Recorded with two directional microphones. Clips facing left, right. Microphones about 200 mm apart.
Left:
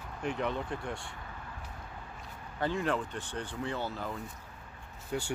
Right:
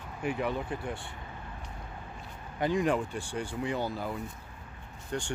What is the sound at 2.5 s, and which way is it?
Speech, 15° right (ahead or behind).